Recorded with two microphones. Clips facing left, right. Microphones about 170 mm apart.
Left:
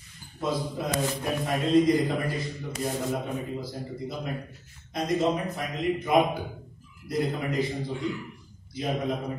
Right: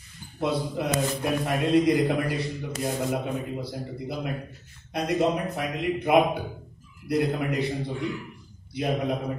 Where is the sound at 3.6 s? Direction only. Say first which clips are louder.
Right 1 dB; 65° right (ahead or behind).